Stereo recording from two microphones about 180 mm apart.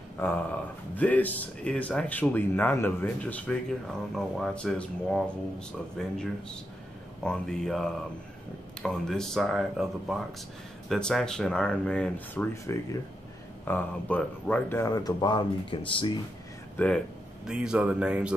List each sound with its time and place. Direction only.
0.2 s speech: 10° left (ahead or behind)
12.7 s speech: 15° left (ahead or behind)
16.7 s speech: 5° left (ahead or behind)
17.5 s speech: 5° right (ahead or behind)